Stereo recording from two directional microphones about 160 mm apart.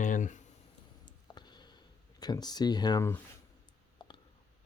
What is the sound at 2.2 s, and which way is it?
Speech, 25° left (ahead or behind).